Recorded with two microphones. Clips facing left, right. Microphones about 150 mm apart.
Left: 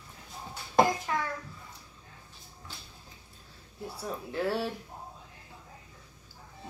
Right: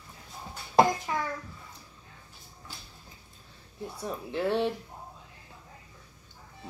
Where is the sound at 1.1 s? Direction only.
15° right (ahead or behind).